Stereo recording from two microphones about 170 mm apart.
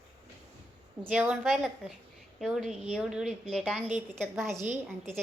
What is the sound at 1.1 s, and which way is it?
A woman's voice, 5° right (ahead or behind).